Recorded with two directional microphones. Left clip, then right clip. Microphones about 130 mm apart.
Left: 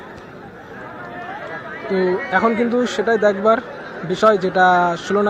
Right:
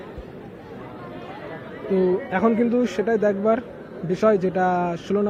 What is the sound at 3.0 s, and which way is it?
Speech, centre (ahead or behind).